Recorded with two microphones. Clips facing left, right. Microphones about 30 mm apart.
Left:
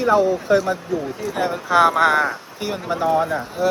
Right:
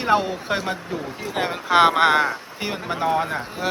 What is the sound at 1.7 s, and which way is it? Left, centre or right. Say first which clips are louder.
Speech: even; right.